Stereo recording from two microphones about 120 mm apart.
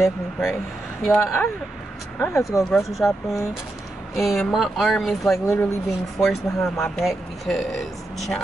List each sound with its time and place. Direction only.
0.0 s speech: centre (ahead or behind)
1.0 s speech: 20° left (ahead or behind)
2.7 s speech: centre (ahead or behind)
5.3 s speech: 20° left (ahead or behind)
6.1 s speech: 5° left (ahead or behind)